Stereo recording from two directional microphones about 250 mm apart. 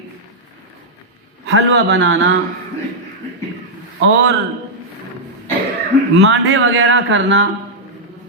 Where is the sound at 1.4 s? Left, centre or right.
Right.